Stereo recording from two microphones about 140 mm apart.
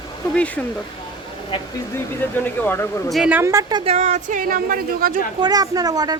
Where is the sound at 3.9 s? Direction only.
55° right (ahead or behind); by 5.1 s 90° right.